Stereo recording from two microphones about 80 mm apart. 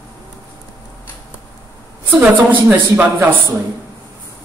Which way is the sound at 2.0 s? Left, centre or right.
Right.